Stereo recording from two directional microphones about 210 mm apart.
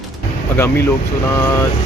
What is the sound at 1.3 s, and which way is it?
Speech, 10° left (ahead or behind).